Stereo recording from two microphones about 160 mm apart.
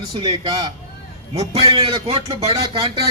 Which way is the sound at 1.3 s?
40° right (ahead or behind).